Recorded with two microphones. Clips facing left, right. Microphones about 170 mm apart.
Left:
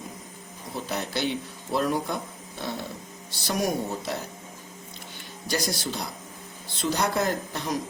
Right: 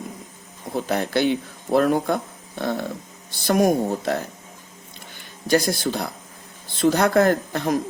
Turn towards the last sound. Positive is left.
turn(degrees=-55)  # may be behind; listen again after turning